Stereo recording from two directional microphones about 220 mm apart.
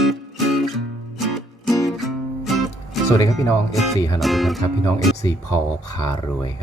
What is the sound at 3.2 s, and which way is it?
Speech, 15° left (ahead or behind).